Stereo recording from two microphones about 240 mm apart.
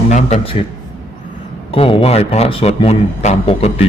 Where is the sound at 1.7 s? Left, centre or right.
Left.